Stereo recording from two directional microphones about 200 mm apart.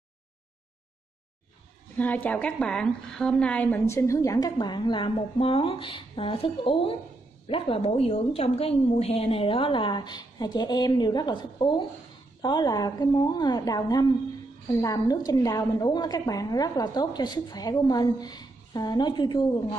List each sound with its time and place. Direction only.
2.0 s a woman's voice: 10° left (ahead or behind)